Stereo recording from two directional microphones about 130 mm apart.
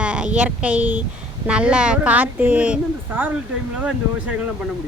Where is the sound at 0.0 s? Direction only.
10° right (ahead or behind).